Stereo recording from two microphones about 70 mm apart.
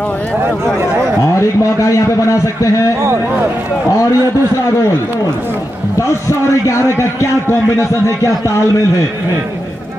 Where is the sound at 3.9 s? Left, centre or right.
Left.